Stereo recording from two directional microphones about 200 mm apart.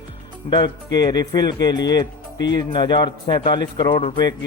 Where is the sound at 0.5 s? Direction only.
20° left (ahead or behind).